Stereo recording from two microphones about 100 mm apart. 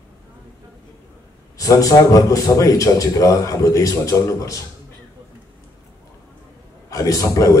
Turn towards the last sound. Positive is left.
turn(degrees=35)  # may be behind; listen again after turning